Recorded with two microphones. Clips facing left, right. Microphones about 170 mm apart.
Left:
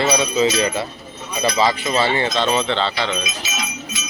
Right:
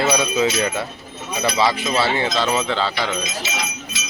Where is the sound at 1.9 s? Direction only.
5° right (ahead or behind).